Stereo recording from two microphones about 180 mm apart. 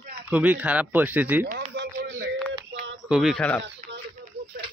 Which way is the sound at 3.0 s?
5° right (ahead or behind).